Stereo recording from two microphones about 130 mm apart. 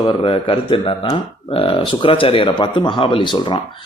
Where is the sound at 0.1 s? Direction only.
45° left (ahead or behind).